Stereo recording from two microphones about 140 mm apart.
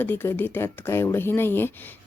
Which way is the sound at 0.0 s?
15° left (ahead or behind).